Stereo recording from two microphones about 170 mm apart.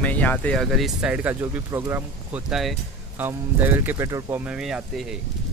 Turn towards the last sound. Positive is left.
turn(degrees=-5)  # may be behind; listen again after turning